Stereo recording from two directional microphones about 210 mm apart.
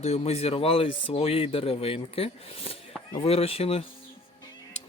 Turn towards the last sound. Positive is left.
turn(degrees=30)  # may be behind; listen again after turning